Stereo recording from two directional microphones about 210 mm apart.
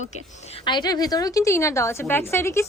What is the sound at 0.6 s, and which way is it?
A woman's voice, 20° left (ahead or behind).